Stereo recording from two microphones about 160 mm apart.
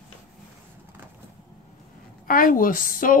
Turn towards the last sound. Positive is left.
turn(degrees=60)  # may be behind; listen again after turning